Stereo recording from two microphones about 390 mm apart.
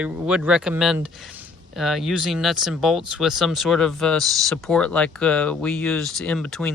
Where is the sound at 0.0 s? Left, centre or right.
Centre.